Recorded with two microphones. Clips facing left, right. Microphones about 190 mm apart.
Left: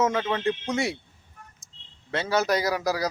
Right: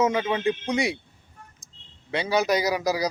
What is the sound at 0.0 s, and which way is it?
Speech, 15° right (ahead or behind).